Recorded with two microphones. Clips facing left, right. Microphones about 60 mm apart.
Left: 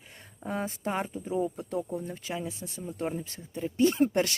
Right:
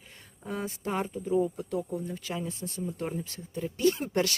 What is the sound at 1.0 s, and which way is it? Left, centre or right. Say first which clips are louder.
Speech: right 4 dB; centre.